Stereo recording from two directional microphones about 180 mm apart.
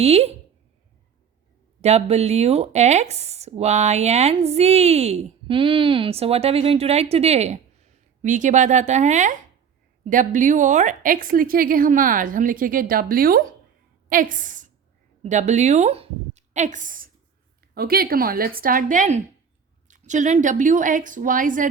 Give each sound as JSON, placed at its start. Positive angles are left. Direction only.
{"t": 0.0, "sound": "speech", "side_deg": -35}
{"t": 1.8, "sound": "a woman's voice", "side_deg": -35}